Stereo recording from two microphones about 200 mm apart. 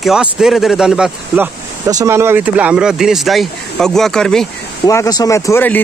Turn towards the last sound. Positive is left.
turn(degrees=10)  # may be behind; listen again after turning